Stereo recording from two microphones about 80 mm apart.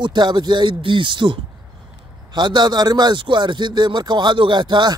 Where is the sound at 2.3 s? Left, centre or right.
Right.